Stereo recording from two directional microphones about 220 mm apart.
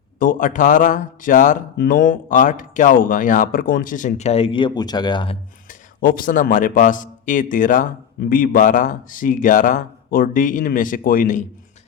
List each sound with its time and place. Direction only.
0.2 s a man's voice: 35° left (ahead or behind); by 5.4 s 20° left (ahead or behind)
5.6 s a man's voice: 40° left (ahead or behind)